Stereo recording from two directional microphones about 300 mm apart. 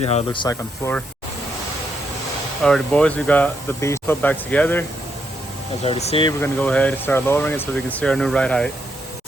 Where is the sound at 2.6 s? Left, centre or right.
Centre.